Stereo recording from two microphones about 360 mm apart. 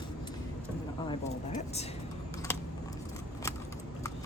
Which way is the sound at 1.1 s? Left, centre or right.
Centre.